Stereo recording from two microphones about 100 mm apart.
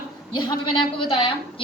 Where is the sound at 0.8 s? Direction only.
65° left (ahead or behind).